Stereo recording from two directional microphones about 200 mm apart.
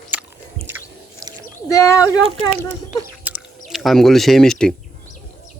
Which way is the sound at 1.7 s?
15° left (ahead or behind).